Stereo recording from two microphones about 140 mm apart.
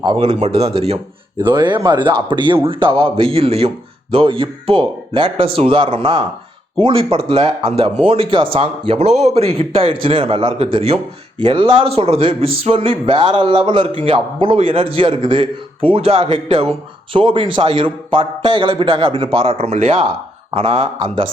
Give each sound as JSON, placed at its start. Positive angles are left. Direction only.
{"t": 0.0, "sound": "a man's voice", "side_deg": -35}
{"t": 1.5, "sound": "a man's voice", "side_deg": -35}